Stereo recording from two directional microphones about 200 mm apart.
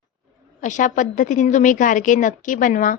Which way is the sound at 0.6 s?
40° left (ahead or behind).